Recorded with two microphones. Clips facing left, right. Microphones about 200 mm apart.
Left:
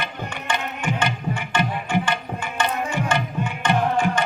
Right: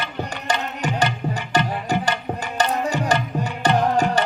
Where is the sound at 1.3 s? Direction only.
40° right (ahead or behind).